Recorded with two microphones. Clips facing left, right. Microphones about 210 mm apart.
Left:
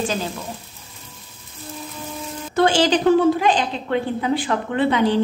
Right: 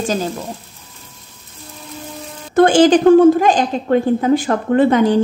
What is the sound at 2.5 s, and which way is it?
A woman's voice, 50° right (ahead or behind).